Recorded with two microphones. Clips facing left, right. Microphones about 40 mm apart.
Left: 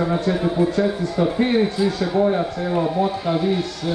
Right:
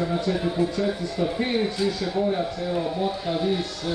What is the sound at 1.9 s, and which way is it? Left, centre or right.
Speech, left.